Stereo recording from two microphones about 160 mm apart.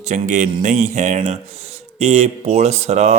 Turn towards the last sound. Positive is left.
turn(degrees=-40)  # may be behind; listen again after turning